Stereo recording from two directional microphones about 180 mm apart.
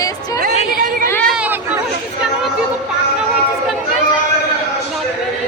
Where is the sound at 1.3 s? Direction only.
10° right (ahead or behind).